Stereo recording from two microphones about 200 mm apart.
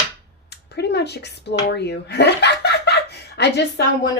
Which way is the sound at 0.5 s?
55° left (ahead or behind).